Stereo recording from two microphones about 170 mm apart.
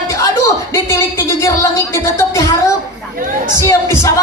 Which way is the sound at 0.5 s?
15° left (ahead or behind).